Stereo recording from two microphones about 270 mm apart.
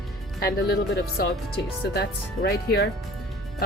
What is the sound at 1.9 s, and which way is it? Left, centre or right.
Speech, left.